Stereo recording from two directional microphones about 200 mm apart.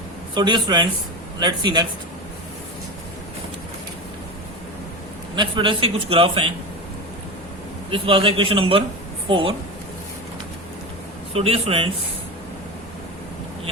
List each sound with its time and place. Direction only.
0.3 s a man's voice: 20° right (ahead or behind)
5.3 s a man's voice: 25° right (ahead or behind)
7.9 s a man's voice: 25° right (ahead or behind)
11.3 s a man's voice: 30° right (ahead or behind)